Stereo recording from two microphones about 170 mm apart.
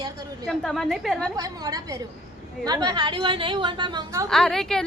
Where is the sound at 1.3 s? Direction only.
20° right (ahead or behind).